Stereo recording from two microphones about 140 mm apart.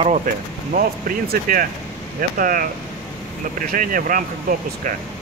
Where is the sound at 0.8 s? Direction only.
90° right.